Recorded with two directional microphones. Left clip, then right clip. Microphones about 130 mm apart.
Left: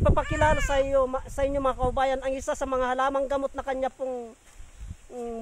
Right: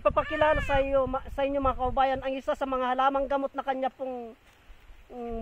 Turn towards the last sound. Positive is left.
turn(degrees=20)  # may be behind; listen again after turning